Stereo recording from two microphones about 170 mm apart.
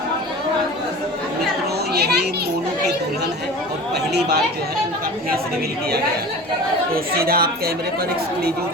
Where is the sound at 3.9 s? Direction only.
75° right (ahead or behind).